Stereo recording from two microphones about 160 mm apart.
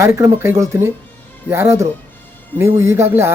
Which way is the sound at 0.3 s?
15° right (ahead or behind).